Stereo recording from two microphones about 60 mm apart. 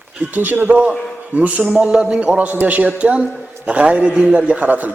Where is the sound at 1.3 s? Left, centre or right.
Right.